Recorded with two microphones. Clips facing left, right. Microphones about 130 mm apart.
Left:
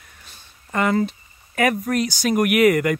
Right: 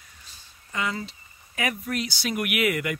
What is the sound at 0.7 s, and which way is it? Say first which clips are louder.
Speech: left 10 dB; 55° left (ahead or behind).